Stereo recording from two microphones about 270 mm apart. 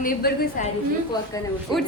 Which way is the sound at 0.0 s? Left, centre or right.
Left.